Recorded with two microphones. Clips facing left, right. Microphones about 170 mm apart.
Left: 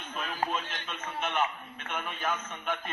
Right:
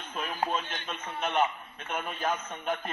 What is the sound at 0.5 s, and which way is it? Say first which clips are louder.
A man's voice: right 2 dB; 35° right (ahead or behind).